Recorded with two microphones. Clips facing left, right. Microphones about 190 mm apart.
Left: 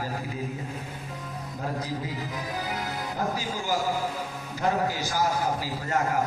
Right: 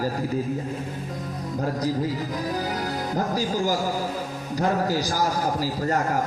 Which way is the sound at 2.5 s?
40° right (ahead or behind).